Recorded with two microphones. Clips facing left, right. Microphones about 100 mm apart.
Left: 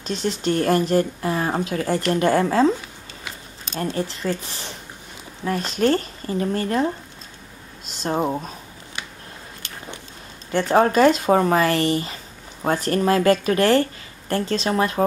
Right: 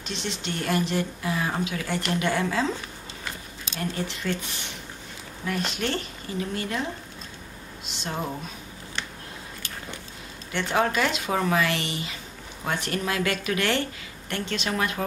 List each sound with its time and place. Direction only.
0.0 s speech: 40° left (ahead or behind)
3.8 s speech: 35° left (ahead or behind)
10.5 s speech: 40° left (ahead or behind)